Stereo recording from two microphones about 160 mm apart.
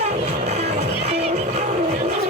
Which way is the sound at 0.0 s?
45° right (ahead or behind).